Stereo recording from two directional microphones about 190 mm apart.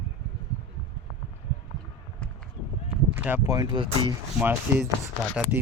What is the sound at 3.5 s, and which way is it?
Speech, 25° right (ahead or behind).